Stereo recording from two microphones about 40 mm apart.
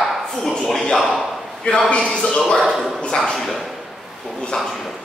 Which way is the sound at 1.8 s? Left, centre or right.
Left.